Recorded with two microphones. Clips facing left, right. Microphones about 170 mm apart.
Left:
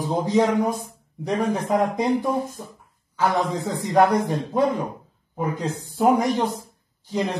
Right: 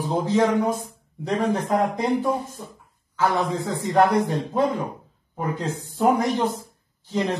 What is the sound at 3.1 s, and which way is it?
Speech, 15° left (ahead or behind).